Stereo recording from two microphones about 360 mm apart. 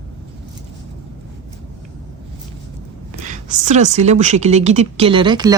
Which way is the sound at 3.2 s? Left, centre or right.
Centre.